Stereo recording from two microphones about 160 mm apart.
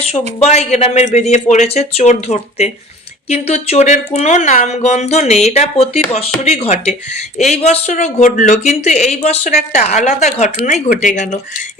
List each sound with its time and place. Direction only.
0.1 s speech: 40° left (ahead or behind)